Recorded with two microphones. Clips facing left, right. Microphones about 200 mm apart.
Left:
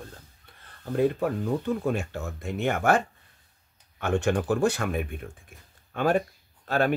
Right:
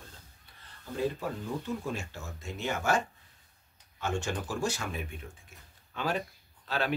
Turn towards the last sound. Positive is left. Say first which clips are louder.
# left 8 dB
turn(degrees=50)  # may be behind; listen again after turning